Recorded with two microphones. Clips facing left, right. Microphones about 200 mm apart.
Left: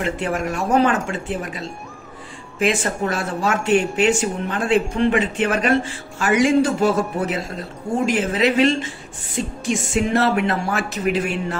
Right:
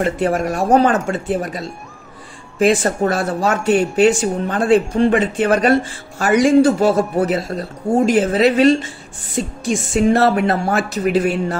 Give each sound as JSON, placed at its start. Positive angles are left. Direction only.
{"t": 0.0, "sound": "speech", "side_deg": -40}